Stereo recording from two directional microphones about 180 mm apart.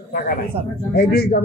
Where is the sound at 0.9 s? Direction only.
60° left (ahead or behind).